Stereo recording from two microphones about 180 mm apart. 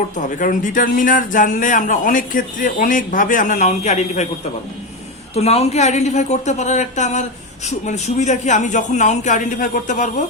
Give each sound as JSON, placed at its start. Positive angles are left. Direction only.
{"t": 0.2, "sound": "a man's voice", "side_deg": 45}
{"t": 5.3, "sound": "a man's voice", "side_deg": 35}